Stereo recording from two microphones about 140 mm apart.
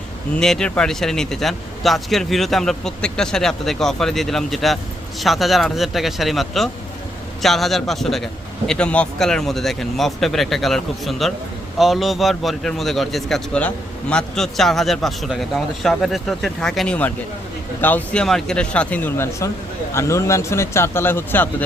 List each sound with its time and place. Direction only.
0.3 s a man's voice: 5° left (ahead or behind)